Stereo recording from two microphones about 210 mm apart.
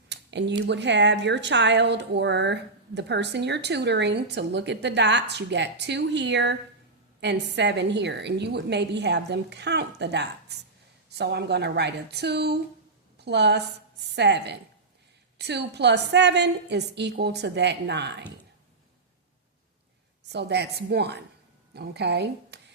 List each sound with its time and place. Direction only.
0.1 s a sound: 55° right (ahead or behind)
0.7 s a woman's voice: 55° right (ahead or behind)
20.3 s a woman's voice: 55° right (ahead or behind)